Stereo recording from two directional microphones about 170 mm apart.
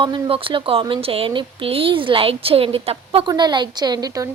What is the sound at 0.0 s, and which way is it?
Speech, 30° right (ahead or behind).